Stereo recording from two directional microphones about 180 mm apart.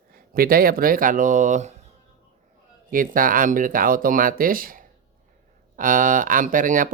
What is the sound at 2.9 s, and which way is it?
Speech, 50° right (ahead or behind).